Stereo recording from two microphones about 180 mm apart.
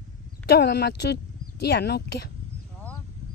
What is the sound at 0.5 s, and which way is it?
Speech, 65° left (ahead or behind).